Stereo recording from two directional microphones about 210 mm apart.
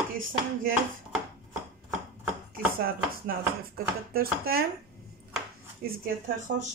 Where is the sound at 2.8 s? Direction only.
45° right (ahead or behind).